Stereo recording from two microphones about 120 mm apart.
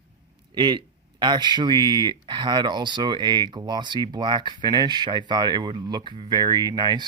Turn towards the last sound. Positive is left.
turn(degrees=-35)  # may be behind; listen again after turning